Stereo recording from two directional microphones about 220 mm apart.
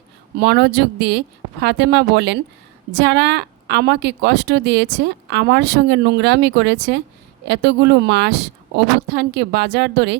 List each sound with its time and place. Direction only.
0.3 s a woman's voice: 50° right (ahead or behind)